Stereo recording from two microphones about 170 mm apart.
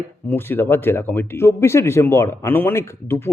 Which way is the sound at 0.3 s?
10° left (ahead or behind).